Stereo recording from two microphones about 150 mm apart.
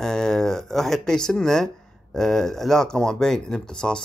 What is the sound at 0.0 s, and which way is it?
Speech, 5° left (ahead or behind).